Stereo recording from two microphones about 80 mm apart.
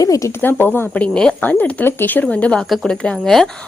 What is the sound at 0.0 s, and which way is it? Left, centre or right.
Speech, left.